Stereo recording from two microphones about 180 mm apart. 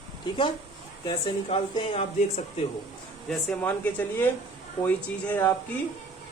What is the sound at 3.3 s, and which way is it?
A man's voice, 5° left (ahead or behind).